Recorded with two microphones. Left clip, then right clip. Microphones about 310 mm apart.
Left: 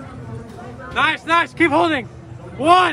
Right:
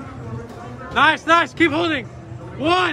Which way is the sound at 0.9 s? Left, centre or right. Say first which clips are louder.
Right 2 dB; centre.